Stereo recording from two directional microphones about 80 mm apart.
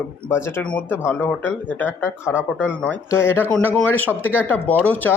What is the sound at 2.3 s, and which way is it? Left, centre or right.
Speech, centre.